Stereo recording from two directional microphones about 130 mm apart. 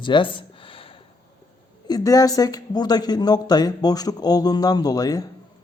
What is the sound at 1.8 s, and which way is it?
A man's voice, 30° left (ahead or behind).